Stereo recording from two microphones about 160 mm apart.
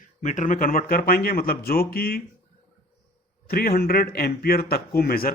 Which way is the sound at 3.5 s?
70° left (ahead or behind).